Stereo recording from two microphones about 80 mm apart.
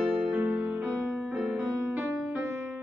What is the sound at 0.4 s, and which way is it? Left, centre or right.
Music, right.